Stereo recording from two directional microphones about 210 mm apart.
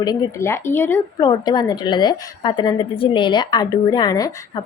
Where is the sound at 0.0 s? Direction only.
15° left (ahead or behind).